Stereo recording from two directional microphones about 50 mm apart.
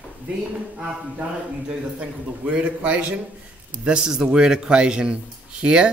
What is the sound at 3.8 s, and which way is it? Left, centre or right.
Speech, centre.